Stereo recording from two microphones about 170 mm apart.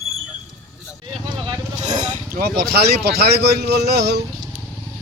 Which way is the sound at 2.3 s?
70° right (ahead or behind).